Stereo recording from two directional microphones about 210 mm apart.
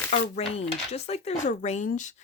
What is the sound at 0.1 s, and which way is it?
Speech, 30° left (ahead or behind).